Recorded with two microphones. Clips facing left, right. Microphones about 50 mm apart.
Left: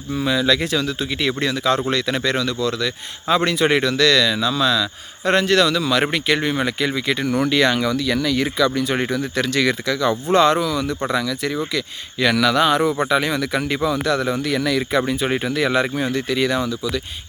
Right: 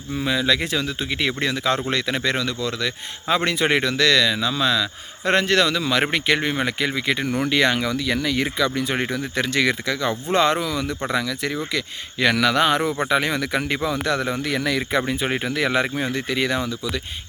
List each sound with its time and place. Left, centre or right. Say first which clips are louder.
0.3 s speech: left 2 dB; right
7.3 s speech: left 4 dB; centre
7.5 s speech: even; right